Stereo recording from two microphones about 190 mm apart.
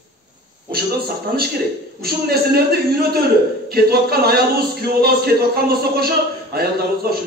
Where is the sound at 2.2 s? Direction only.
55° right (ahead or behind).